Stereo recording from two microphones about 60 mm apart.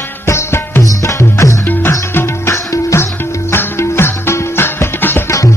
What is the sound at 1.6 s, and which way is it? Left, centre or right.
Music, left.